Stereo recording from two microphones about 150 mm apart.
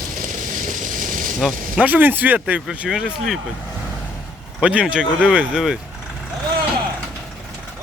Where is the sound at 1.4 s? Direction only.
5° right (ahead or behind).